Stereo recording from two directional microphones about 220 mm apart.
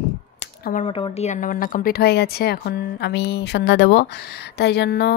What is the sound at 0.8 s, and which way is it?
Speech, 25° left (ahead or behind).